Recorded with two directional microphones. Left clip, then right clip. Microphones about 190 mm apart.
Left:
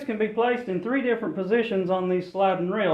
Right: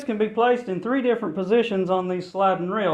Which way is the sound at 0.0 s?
35° right (ahead or behind).